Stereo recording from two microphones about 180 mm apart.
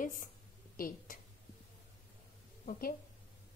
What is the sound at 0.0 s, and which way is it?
A woman's voice, 50° left (ahead or behind).